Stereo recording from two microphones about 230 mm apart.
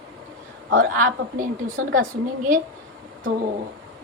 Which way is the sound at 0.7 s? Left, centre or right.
Right.